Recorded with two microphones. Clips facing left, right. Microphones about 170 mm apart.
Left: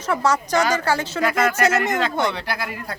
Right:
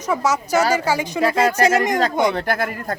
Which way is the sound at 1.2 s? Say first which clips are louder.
Right 4 dB; 30° right (ahead or behind).